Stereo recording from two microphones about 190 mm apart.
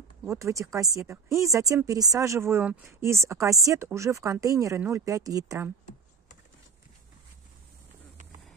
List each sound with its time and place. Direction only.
0.3 s speech: 15° right (ahead or behind)